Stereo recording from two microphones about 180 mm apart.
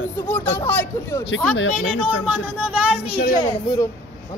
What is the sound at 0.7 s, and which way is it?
Speech, 15° left (ahead or behind).